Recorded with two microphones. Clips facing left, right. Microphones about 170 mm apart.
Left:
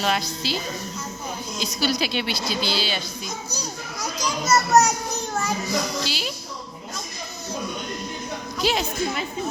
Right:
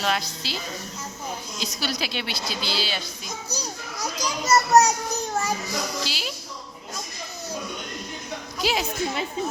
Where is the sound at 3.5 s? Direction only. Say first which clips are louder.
Left 1 dB; 35° right (ahead or behind).